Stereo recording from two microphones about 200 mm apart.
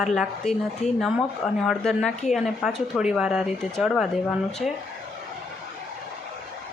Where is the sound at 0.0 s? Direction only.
Centre (ahead or behind).